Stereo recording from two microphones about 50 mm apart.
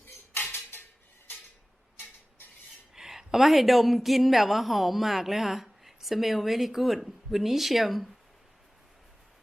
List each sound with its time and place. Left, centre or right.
0.5 s dishes: left
2.9 s a woman's voice: centre